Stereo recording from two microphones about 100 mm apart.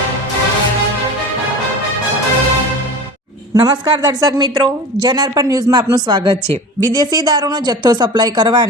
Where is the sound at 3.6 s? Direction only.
45° right (ahead or behind).